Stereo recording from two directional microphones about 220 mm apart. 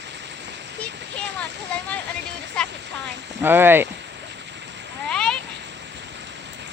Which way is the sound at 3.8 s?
50° right (ahead or behind).